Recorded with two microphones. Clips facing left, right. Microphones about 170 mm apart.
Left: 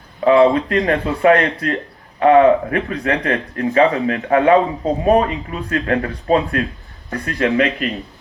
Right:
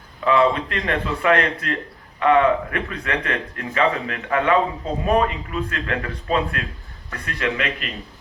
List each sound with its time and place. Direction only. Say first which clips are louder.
0.3 s speech: left 6 dB; 40° left (ahead or behind)